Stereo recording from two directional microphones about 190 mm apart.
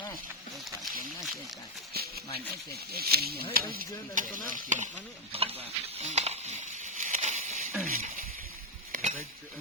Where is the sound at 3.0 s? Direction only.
55° right (ahead or behind).